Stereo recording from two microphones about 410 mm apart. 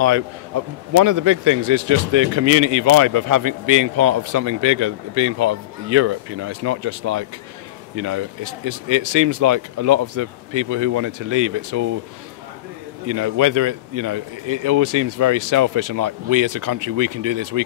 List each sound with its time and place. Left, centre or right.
0.0 s a man's voice: right
13.1 s a man's voice: right